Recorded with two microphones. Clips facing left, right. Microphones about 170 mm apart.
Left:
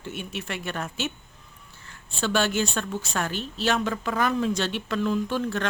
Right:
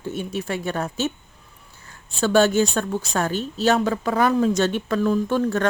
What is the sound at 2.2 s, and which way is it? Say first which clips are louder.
Speech: right 7 dB; 45° right (ahead or behind).